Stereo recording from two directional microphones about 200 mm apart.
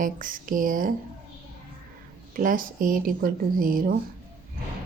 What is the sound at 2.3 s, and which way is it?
Speech, 45° right (ahead or behind).